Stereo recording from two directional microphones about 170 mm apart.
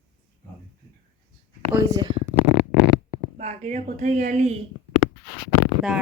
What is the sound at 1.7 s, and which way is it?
Speech, 25° right (ahead or behind).